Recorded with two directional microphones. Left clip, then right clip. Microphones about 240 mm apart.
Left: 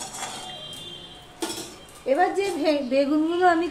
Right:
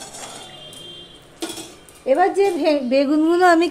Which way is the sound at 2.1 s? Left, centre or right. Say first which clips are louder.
Right 6 dB; right.